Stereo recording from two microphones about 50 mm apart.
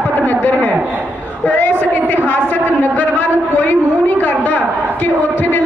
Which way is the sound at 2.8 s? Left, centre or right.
Left.